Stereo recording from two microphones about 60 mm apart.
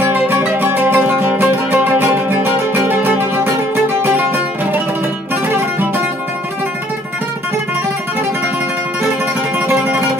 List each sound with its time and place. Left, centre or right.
0.0 s music: right
9.7 s music: right